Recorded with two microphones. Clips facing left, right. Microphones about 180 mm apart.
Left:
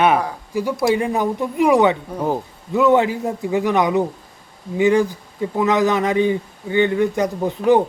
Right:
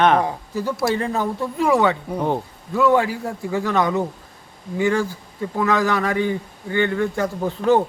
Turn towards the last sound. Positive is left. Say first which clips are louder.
# left 2 dB
turn(degrees=15)  # may be behind; listen again after turning